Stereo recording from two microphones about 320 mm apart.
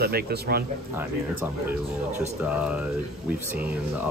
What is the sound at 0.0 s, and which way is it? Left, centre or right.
Speech, right.